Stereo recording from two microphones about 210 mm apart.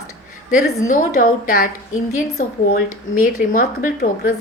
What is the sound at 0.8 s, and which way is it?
Speech, 40° left (ahead or behind).